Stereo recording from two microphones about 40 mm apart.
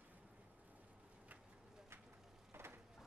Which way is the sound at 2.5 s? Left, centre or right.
Right.